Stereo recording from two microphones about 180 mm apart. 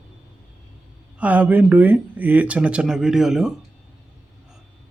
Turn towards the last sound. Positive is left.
turn(degrees=0)  # may be behind; listen again after turning